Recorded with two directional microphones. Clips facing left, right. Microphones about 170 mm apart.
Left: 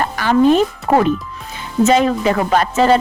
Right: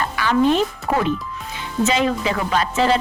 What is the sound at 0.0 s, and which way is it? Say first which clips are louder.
Speech: left 4 dB; 45° left (ahead or behind).